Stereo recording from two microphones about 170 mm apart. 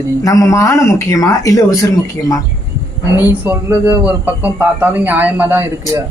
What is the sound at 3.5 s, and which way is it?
Speech, 15° right (ahead or behind).